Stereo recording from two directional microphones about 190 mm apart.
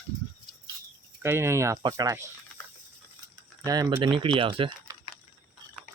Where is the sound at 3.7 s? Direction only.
20° right (ahead or behind).